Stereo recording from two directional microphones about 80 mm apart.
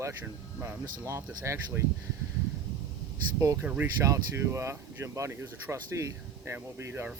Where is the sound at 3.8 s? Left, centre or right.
Right.